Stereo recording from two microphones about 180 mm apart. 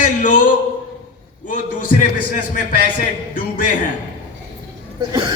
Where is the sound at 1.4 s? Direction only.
45° left (ahead or behind).